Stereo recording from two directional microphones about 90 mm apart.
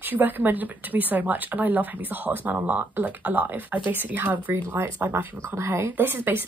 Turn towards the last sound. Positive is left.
turn(degrees=-20)  # may be behind; listen again after turning